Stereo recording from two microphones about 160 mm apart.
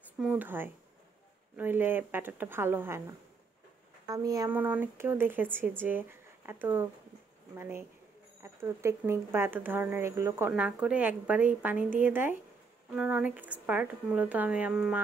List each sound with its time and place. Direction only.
0.2 s speech: 10° right (ahead or behind)
4.1 s speech: 20° right (ahead or behind)
4.5 s speech: 10° right (ahead or behind)